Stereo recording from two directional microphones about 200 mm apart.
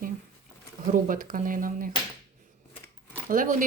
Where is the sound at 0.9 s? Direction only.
40° right (ahead or behind).